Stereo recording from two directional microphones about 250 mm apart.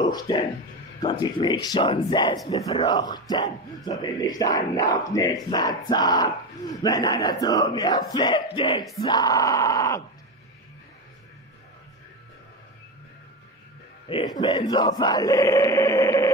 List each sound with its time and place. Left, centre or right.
0.0 s speech: centre
1.2 s battle cry: centre
8.5 s speech: centre
9.0 s battle cry: centre
14.0 s battle cry: centre